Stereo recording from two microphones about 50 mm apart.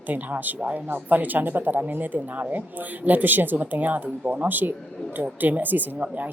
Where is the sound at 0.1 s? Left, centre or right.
Right.